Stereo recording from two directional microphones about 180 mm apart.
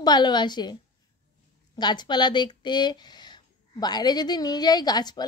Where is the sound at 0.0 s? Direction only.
25° left (ahead or behind).